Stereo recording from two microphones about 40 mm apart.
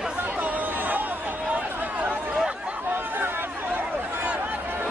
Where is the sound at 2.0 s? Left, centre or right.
Right.